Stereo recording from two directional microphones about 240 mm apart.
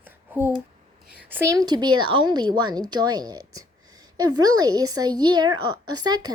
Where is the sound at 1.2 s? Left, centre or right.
Centre.